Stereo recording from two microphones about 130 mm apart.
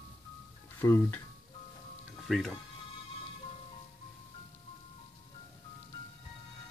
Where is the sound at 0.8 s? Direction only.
20° left (ahead or behind).